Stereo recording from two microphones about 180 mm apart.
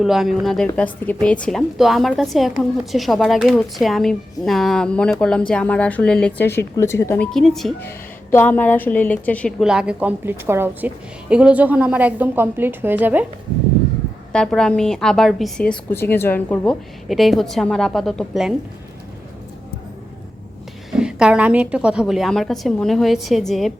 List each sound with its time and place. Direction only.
0.0 s a woman's voice: centre (ahead or behind); by 7.3 s 15° left (ahead or behind)
7.3 s a woman's voice: centre (ahead or behind)
7.8 s a woman's voice: 10° left (ahead or behind); by 13.2 s 10° right (ahead or behind)
14.3 s a woman's voice: 5° left (ahead or behind)
20.9 s a woman's voice: 5° right (ahead or behind)